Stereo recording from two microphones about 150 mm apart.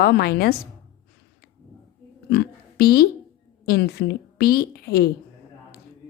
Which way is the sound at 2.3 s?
90° left.